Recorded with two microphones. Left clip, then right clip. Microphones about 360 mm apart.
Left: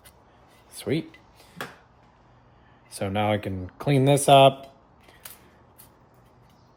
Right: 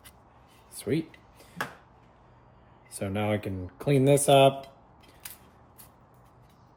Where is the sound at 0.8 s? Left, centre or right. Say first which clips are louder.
Left 2 dB; centre.